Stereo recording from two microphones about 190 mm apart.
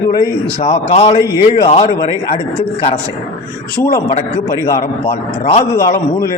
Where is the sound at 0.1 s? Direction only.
20° left (ahead or behind).